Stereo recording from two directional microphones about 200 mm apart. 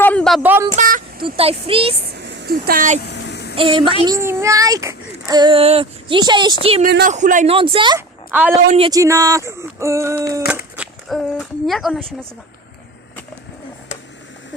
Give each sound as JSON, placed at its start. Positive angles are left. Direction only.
{"t": 0.0, "sound": "a sound", "side_deg": 5}
{"t": 0.4, "sound": "vehicle", "side_deg": -10}
{"t": 0.8, "sound": "vehicle", "side_deg": -45}
{"t": 1.2, "sound": "speech", "side_deg": -30}
{"t": 2.0, "sound": "a sound", "side_deg": -55}
{"t": 3.1, "sound": "a sound", "side_deg": 55}
{"t": 3.5, "sound": "a child's voice", "side_deg": -25}
{"t": 6.8, "sound": "speech", "side_deg": -45}
{"t": 7.5, "sound": "a child's voice", "side_deg": -25}
{"t": 7.9, "sound": "a sound", "side_deg": -10}
{"t": 8.9, "sound": "speech", "side_deg": -15}
{"t": 10.8, "sound": "speech", "side_deg": 0}